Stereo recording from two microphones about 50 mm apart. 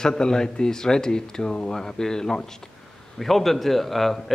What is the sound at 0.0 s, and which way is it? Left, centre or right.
A man's voice, centre.